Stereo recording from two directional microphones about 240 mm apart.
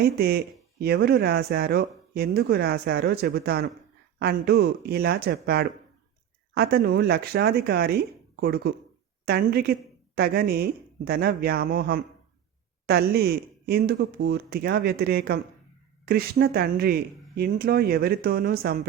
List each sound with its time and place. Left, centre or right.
0.0 s speech: right